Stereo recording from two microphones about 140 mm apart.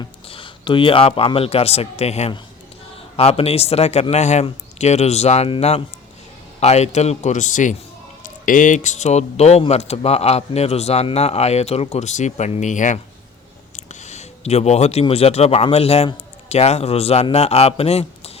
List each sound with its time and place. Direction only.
0.0 s a man's voice: 40° left (ahead or behind)